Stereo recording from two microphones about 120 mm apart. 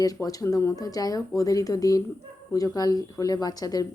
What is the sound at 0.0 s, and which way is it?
A woman's voice, 30° left (ahead or behind).